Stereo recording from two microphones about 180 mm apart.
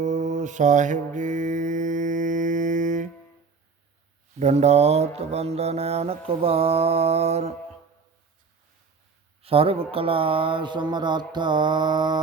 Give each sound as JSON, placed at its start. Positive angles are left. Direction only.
{"t": 0.0, "sound": "mantra", "side_deg": -40}
{"t": 4.4, "sound": "mantra", "side_deg": -40}
{"t": 9.4, "sound": "speech", "side_deg": -30}